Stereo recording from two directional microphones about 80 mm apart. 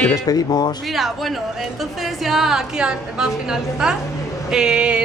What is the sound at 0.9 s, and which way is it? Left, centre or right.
A woman's voice, centre.